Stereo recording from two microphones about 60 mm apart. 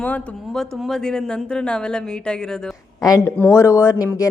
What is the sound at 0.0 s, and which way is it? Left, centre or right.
Speech, left.